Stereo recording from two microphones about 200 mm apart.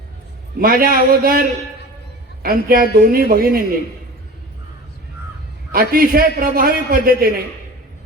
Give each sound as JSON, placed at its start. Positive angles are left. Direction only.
{"t": 0.6, "sound": "a man's voice", "side_deg": -45}
{"t": 5.7, "sound": "a man's voice", "side_deg": -45}